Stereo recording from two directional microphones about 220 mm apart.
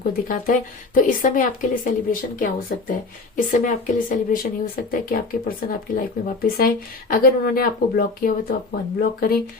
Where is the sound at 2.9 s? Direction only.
40° left (ahead or behind).